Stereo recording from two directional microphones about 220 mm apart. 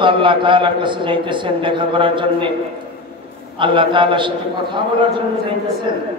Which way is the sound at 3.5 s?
20° right (ahead or behind).